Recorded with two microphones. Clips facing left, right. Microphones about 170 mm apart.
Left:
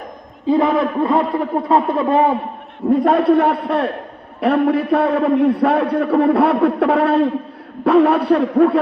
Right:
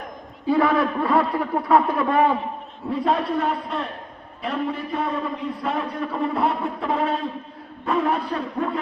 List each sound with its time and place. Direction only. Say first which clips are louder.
0.4 s a man's voice: left 4 dB; 20° left (ahead or behind)
2.9 s a man's voice: left 9 dB; 55° left (ahead or behind); by 8.8 s 70° left (ahead or behind)